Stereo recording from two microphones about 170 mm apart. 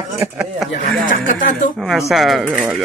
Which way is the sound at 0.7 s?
50° left (ahead or behind).